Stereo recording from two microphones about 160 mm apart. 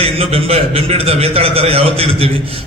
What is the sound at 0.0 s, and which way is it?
A man's voice, 40° right (ahead or behind).